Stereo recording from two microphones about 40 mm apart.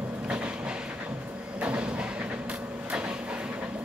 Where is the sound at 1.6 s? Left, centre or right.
Right.